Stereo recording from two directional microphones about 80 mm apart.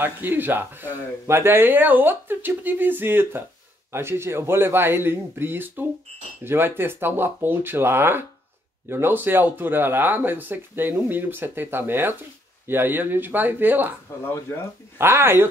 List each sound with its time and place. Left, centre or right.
0.0 s speech: right
15.0 s speech: right